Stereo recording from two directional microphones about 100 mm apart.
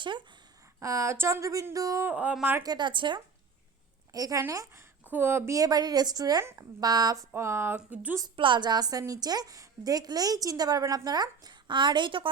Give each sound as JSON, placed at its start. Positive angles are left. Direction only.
{"t": 0.0, "sound": "speech", "side_deg": -50}
{"t": 0.8, "sound": "a woman's voice", "side_deg": -30}
{"t": 2.0, "sound": "speech", "side_deg": -15}
{"t": 2.6, "sound": "speech", "side_deg": -50}
{"t": 4.1, "sound": "a woman's voice", "side_deg": -35}
{"t": 6.4, "sound": "speech", "side_deg": -25}
{"t": 6.7, "sound": "a woman's voice", "side_deg": -40}
{"t": 7.3, "sound": "speech", "side_deg": -25}
{"t": 8.4, "sound": "a woman's voice", "side_deg": -55}